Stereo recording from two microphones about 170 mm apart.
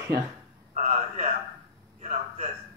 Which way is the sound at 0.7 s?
40° right (ahead or behind).